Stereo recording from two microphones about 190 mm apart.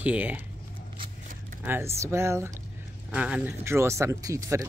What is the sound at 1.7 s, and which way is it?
Speech, 15° right (ahead or behind).